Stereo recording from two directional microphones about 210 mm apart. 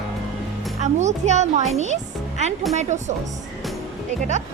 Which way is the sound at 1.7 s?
35° right (ahead or behind).